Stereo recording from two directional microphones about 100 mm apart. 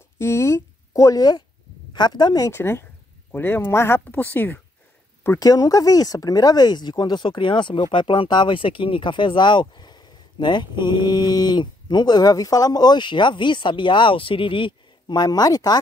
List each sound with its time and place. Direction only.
0.2 s a sound: 25° left (ahead or behind)
2.0 s speech: 45° left (ahead or behind)
2.5 s speech: 25° left (ahead or behind)
5.4 s speech: 35° left (ahead or behind)